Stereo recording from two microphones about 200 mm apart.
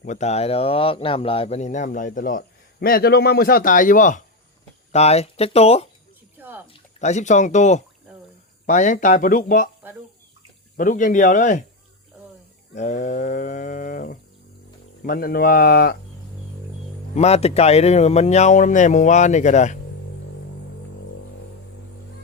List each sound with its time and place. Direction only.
0.0 s a man's voice: 35° left (ahead or behind)
6.3 s music: 10° right (ahead or behind)
7.0 s speech: 35° left (ahead or behind)
10.8 s speech: 40° left (ahead or behind)
12.7 s a man's voice: 40° left (ahead or behind)
17.2 s speech: 30° left (ahead or behind)